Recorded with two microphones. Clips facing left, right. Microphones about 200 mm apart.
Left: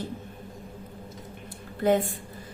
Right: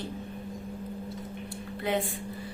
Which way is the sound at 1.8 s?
45° left (ahead or behind).